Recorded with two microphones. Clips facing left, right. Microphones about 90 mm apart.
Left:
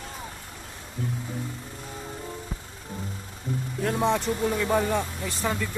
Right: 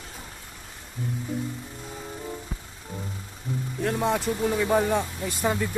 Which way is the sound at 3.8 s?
Centre (ahead or behind).